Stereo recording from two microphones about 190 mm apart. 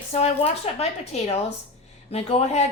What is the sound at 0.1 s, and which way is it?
A woman's voice, 35° left (ahead or behind).